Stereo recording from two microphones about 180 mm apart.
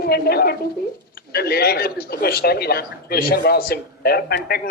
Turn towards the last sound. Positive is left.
turn(degrees=60)  # may be behind; listen again after turning